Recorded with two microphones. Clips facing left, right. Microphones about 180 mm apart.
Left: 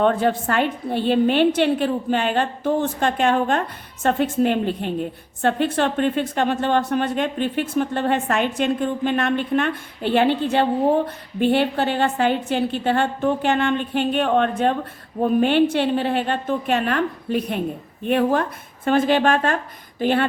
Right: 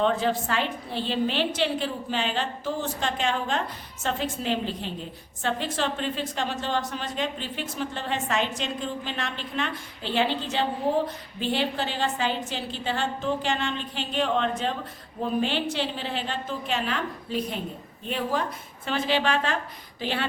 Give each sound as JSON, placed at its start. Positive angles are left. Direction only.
{"t": 0.0, "sound": "a woman's voice", "side_deg": 55}